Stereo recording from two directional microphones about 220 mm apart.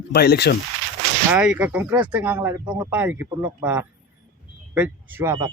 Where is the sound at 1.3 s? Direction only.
5° right (ahead or behind).